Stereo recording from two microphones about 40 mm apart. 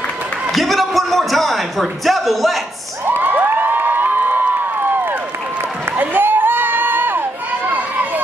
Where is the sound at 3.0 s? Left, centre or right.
Right.